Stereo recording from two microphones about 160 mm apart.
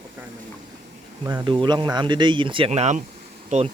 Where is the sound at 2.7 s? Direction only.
45° right (ahead or behind).